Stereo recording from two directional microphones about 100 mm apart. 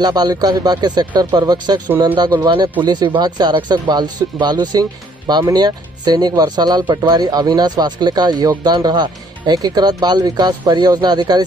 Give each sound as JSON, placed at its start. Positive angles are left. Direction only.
{"t": 0.0, "sound": "speech", "side_deg": -45}